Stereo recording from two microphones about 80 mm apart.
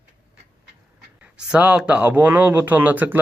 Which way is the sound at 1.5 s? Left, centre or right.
Centre.